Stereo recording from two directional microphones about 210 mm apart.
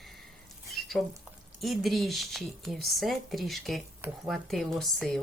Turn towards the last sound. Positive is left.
turn(degrees=0)  # may be behind; listen again after turning